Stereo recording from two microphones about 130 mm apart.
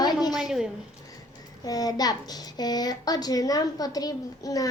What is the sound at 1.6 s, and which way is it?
A child's voice, 30° left (ahead or behind).